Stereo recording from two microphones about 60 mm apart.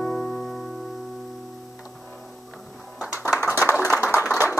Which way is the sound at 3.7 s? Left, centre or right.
Right.